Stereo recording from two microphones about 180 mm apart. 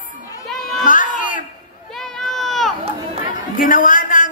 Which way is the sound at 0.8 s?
45° left (ahead or behind).